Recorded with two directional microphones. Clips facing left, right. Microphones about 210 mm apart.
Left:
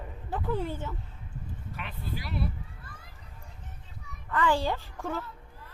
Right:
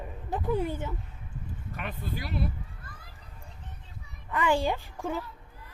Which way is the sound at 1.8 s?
50° right (ahead or behind).